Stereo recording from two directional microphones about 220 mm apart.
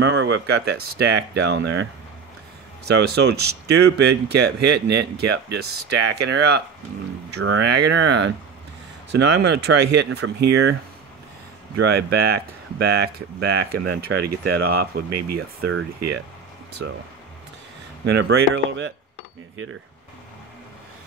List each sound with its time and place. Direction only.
0.0 s speech: 55° right (ahead or behind)
3.1 s speech: 45° right (ahead or behind)
7.3 s speech: 60° right (ahead or behind)
11.9 s speech: 45° right (ahead or behind)
18.0 s speech: 50° right (ahead or behind)